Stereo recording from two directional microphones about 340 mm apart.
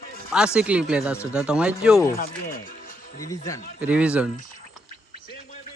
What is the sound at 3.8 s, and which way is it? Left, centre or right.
Speech, centre.